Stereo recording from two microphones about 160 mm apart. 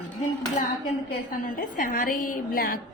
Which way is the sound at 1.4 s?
60° left (ahead or behind).